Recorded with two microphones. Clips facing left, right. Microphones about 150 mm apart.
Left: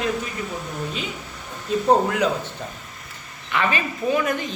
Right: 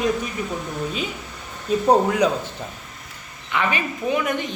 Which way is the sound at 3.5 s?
15° right (ahead or behind).